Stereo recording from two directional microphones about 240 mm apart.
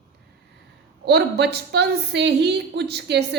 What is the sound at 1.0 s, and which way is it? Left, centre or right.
A woman's voice, right.